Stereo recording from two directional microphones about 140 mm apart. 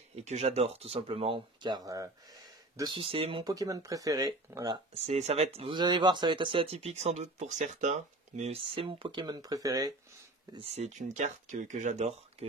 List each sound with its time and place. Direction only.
0.1 s speech: 50° right (ahead or behind); by 2.0 s 25° right (ahead or behind)
2.8 s speech: 35° right (ahead or behind)
3.5 s speech: 25° right (ahead or behind)
4.9 s speech: 50° right (ahead or behind)
5.8 s speech: 30° right (ahead or behind)
10.6 s speech: 50° right (ahead or behind)